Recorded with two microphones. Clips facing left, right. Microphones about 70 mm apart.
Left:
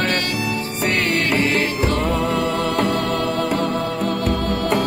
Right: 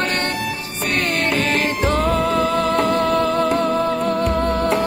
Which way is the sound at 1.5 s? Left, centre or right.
Right.